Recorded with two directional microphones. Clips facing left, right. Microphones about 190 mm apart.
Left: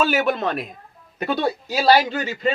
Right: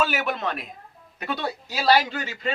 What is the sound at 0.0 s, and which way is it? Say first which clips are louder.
Speech: left 5 dB; 30° left (ahead or behind).